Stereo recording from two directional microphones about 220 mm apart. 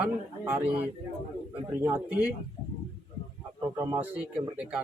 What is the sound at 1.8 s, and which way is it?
Speech, 10° right (ahead or behind).